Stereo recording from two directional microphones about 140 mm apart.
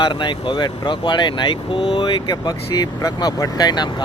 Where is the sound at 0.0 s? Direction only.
35° left (ahead or behind).